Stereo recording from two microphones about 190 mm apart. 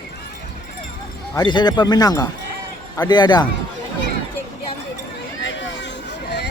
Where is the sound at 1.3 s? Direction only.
20° left (ahead or behind).